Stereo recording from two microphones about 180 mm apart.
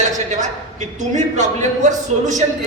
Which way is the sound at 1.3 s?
40° right (ahead or behind).